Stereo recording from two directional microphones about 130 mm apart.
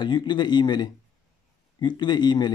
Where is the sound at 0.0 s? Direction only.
35° left (ahead or behind).